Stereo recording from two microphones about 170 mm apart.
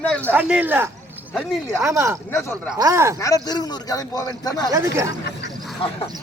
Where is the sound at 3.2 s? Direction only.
20° left (ahead or behind).